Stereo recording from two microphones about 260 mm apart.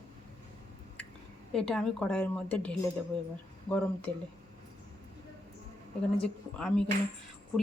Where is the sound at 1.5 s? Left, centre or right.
Centre.